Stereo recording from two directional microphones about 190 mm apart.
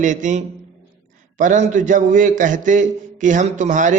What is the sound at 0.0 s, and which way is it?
A man's voice, 40° right (ahead or behind).